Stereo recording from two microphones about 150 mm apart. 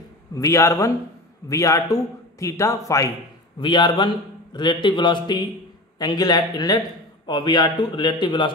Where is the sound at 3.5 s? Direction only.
30° left (ahead or behind).